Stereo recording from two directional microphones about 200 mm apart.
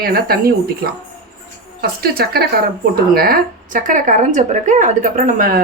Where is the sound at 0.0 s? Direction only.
50° right (ahead or behind).